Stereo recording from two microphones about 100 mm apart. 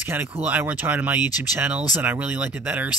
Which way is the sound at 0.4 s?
15° right (ahead or behind).